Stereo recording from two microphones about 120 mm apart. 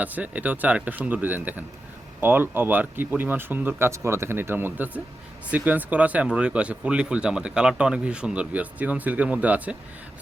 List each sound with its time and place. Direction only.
0.0 s speech: 15° right (ahead or behind)